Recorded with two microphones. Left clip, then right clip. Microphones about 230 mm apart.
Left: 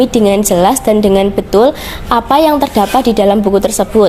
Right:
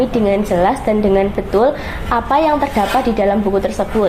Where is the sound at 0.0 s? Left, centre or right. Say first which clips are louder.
Left 5 dB; left.